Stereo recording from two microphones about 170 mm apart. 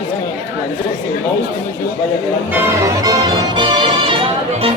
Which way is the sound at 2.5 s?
15° right (ahead or behind).